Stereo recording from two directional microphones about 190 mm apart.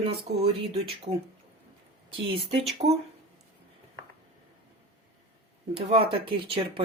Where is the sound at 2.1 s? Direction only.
30° right (ahead or behind).